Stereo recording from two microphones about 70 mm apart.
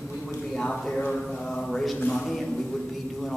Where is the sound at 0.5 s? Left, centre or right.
Centre.